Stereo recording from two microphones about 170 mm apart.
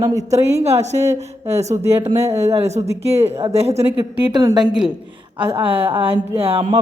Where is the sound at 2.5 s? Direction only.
40° right (ahead or behind).